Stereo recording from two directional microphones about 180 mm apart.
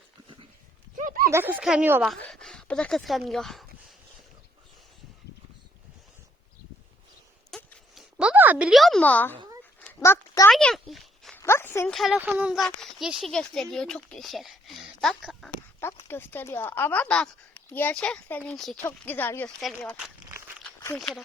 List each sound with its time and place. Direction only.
0.9 s a sound: 50° right (ahead or behind)
1.3 s speech: 10° right (ahead or behind)
2.2 s speech: 5° left (ahead or behind)
7.5 s a sound: centre (ahead or behind)
10.0 s a child's voice: 15° left (ahead or behind)
10.5 s speech: centre (ahead or behind)
11.3 s a sound: 15° left (ahead or behind)
11.9 s speech: centre (ahead or behind)
16.0 s speech: 10° left (ahead or behind)